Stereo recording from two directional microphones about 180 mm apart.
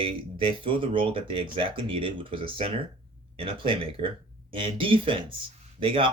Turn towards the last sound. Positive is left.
turn(degrees=-30)  # may be behind; listen again after turning